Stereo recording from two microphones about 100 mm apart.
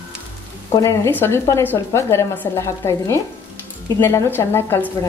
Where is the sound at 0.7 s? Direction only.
30° left (ahead or behind).